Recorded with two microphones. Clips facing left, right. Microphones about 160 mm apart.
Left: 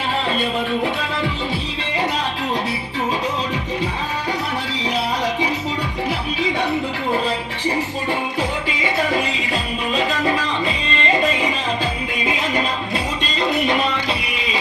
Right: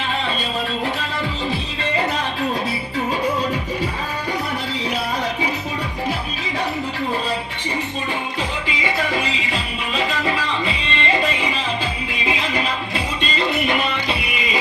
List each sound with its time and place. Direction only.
8.6 s music: 45° left (ahead or behind)
13.2 s music: 5° right (ahead or behind)